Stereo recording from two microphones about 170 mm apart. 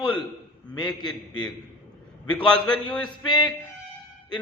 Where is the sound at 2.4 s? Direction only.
30° left (ahead or behind).